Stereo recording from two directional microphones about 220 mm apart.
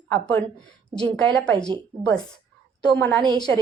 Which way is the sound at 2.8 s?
10° left (ahead or behind).